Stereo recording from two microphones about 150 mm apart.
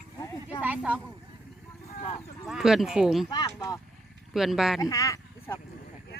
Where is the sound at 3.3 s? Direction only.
25° left (ahead or behind).